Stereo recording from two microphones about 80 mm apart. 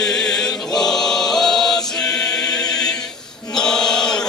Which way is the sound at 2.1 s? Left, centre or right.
Left.